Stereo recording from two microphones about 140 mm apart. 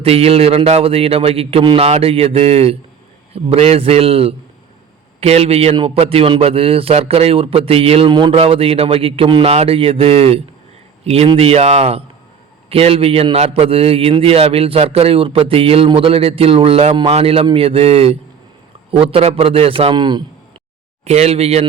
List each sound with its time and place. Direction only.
0.0 s a man's voice: 45° right (ahead or behind)
21.0 s a man's voice: 50° right (ahead or behind)